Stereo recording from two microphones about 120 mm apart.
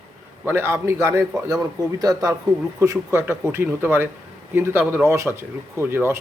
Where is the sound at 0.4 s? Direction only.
20° right (ahead or behind).